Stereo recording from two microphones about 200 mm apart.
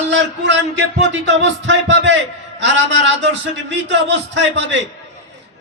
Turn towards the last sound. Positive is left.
turn(degrees=-65)  # may be behind; listen again after turning